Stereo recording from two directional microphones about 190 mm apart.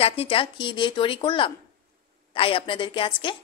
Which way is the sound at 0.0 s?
30° left (ahead or behind).